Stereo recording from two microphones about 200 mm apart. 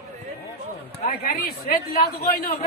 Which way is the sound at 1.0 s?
45° left (ahead or behind).